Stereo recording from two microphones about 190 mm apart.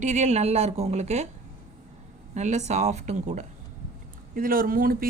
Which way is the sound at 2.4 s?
40° right (ahead or behind).